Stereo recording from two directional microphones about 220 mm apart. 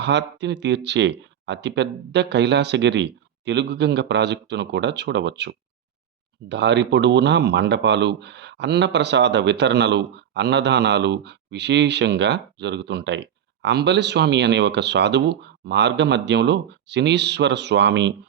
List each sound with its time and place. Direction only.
0.0 s speech: 50° right (ahead or behind)